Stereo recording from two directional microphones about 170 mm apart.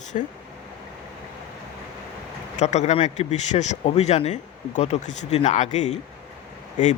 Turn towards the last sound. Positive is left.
turn(degrees=45)  # may be behind; listen again after turning